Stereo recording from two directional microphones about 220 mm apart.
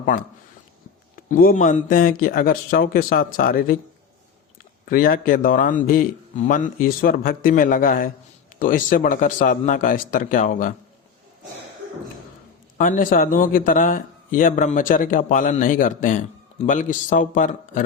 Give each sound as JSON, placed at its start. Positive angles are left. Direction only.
{"t": 0.0, "sound": "speech", "side_deg": 40}
{"t": 4.9, "sound": "speech", "side_deg": 40}
{"t": 12.7, "sound": "speech", "side_deg": 35}